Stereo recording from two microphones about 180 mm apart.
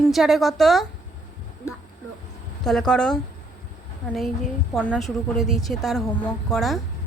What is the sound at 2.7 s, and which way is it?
Speech, 5° left (ahead or behind).